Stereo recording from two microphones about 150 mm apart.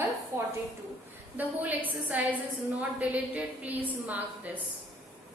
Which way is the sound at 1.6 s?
10° right (ahead or behind).